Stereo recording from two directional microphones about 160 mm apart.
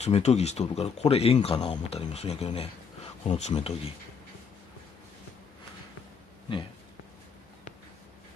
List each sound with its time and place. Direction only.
0.0 s speech: 45° left (ahead or behind)